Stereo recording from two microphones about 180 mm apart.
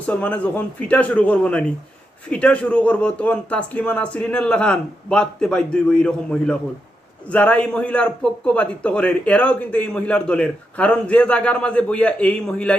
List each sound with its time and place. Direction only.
0.0 s a man's voice: 10° left (ahead or behind)